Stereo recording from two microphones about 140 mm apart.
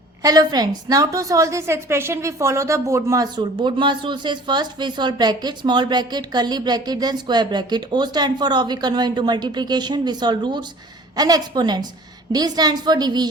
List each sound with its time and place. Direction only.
0.2 s a woman's voice: 25° right (ahead or behind)